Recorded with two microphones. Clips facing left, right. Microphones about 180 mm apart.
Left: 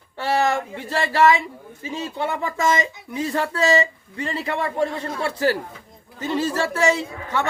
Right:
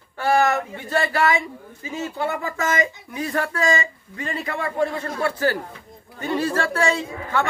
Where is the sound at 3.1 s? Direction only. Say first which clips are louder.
Left 1 dB; 25° left (ahead or behind).